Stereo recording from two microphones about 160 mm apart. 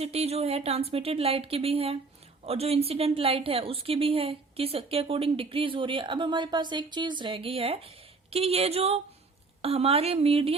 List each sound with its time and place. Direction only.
0.0 s a woman's voice: 40° right (ahead or behind)